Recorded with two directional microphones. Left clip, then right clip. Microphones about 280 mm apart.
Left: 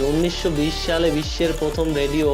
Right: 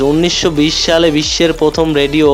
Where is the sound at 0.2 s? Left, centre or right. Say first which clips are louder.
Right 9 dB; right.